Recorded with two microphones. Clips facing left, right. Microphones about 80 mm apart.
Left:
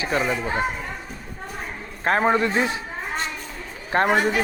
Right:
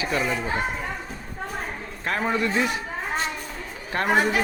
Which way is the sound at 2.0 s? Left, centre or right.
Left.